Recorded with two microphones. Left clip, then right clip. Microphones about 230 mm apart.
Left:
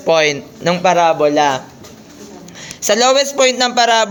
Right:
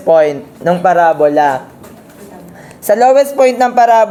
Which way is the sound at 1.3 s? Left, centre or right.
Left.